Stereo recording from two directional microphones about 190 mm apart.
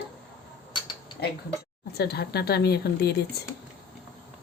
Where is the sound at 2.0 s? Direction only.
55° left (ahead or behind).